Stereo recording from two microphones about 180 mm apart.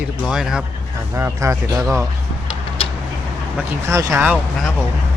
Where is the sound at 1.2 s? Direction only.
15° right (ahead or behind).